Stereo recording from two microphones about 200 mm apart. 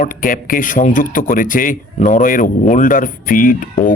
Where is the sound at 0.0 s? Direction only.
45° left (ahead or behind).